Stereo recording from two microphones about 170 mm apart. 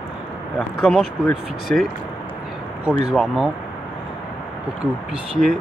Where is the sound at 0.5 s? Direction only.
Centre (ahead or behind).